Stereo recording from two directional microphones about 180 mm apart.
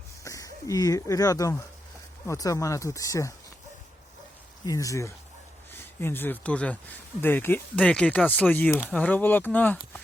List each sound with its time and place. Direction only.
0.3 s speech: 20° left (ahead or behind)
4.6 s speech: 20° left (ahead or behind)